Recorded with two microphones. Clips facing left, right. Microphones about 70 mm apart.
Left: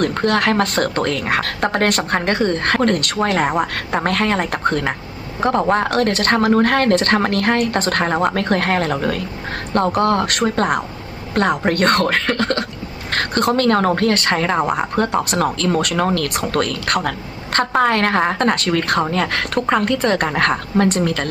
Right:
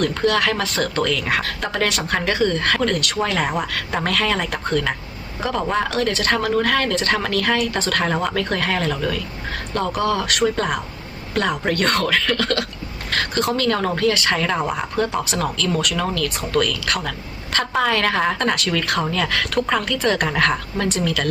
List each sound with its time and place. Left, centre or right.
0.0 s speech: left
6.3 s speech: left
8.4 s speech: left
14.7 s speech: left